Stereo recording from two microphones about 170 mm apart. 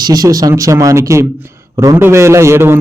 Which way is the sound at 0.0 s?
20° right (ahead or behind).